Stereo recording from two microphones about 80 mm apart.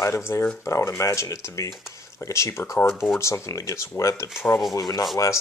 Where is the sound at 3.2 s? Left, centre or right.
Left.